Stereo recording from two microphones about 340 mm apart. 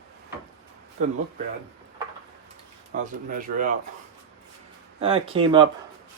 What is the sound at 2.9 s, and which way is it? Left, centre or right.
Speech, right.